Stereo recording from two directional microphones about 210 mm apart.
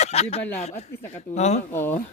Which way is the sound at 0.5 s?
30° left (ahead or behind).